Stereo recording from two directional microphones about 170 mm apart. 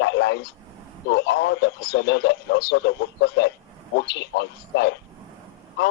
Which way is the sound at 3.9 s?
85° left.